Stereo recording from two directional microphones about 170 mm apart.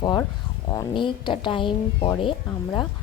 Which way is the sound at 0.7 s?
25° left (ahead or behind).